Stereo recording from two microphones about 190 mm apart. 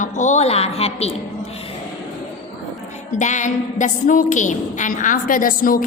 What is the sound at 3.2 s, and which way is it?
A woman's voice, 40° left (ahead or behind).